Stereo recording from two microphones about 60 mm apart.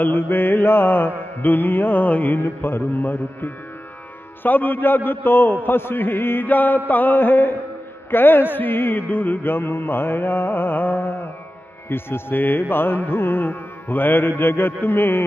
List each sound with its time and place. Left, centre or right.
0.0 s carnatic music: left